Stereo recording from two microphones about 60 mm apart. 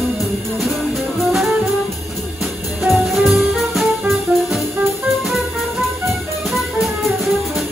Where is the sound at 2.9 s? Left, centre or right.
Centre.